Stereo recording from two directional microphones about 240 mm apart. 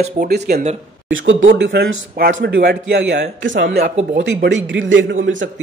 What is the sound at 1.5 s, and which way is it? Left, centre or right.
A man's voice, right.